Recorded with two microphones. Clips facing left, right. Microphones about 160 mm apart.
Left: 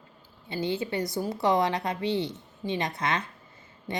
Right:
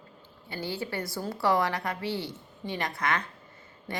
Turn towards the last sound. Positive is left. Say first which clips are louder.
# left 3 dB
turn(degrees=20)  # may be behind; listen again after turning